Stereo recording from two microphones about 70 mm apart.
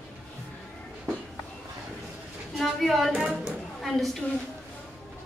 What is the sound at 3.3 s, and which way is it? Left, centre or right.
Speech, centre.